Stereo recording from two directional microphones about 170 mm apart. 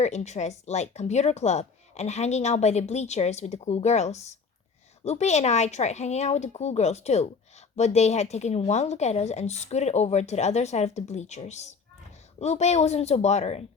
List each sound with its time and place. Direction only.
0.0 s speech: 40° left (ahead or behind)